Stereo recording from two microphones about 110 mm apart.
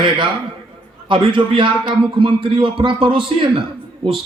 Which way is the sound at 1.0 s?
50° right (ahead or behind).